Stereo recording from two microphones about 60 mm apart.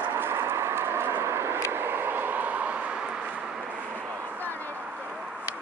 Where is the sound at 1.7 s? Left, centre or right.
Right.